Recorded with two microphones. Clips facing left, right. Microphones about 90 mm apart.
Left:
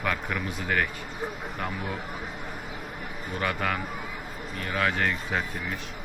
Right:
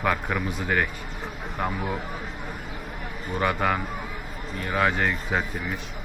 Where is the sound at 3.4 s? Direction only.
20° right (ahead or behind).